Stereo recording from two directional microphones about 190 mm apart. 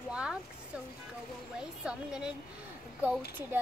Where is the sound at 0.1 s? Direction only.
5° right (ahead or behind).